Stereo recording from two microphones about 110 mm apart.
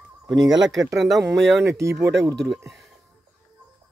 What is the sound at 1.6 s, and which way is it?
Speech, 25° right (ahead or behind).